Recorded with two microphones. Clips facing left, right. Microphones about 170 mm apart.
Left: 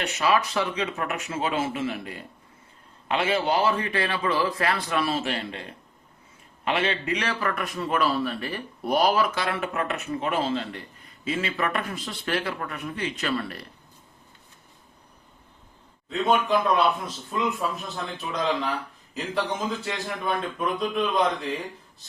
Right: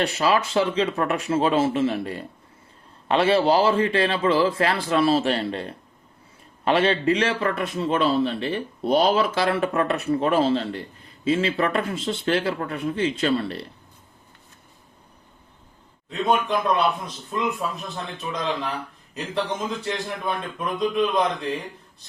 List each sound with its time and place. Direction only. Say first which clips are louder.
0.0 s a man's voice: right 3 dB; 30° right (ahead or behind)
16.0 s a man's voice: even; centre (ahead or behind)
19.1 s a man's voice: right 1 dB; centre (ahead or behind)